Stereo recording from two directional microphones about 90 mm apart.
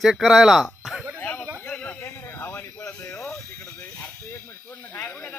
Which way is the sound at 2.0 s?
30° left (ahead or behind).